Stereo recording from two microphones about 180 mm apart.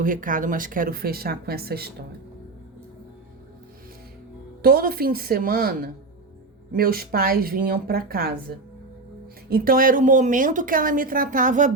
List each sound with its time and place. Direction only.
0.0 s speech: 50° right (ahead or behind)
4.6 s a woman's voice: 55° right (ahead or behind)